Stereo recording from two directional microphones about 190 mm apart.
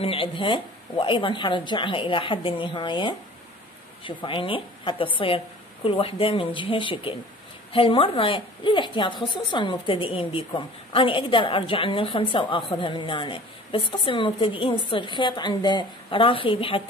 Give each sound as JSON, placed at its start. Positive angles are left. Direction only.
{"t": 0.0, "sound": "a woman's voice", "side_deg": 30}